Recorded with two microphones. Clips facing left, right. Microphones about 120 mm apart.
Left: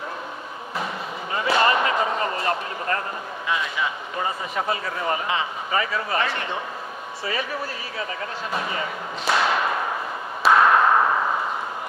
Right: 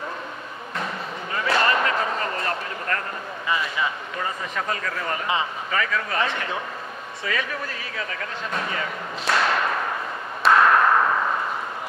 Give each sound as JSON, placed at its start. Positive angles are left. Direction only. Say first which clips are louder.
{"t": 1.5, "sound": "a sound", "louder": "left 2 dB", "side_deg": 5}
{"t": 3.4, "sound": "a man's voice", "louder": "right 1 dB", "side_deg": 0}
{"t": 4.2, "sound": "a man's voice", "louder": "left 3 dB", "side_deg": 15}
{"t": 7.2, "sound": "a man's voice", "louder": "even", "side_deg": 30}
{"t": 9.2, "sound": "thump", "louder": "left 1 dB", "side_deg": 0}
{"t": 10.4, "sound": "a sound", "louder": "even", "side_deg": 5}